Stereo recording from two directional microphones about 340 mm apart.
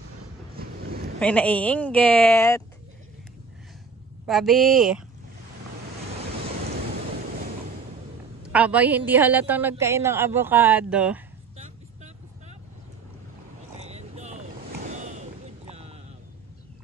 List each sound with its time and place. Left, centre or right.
0.6 s a sound: right
1.2 s a woman's voice: centre
4.3 s a woman's voice: centre
8.5 s a woman's voice: centre
11.5 s vehicle: centre
13.7 s vehicle: centre
14.9 s a sound: right